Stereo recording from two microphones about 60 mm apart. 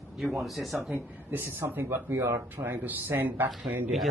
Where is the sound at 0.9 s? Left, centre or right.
Right.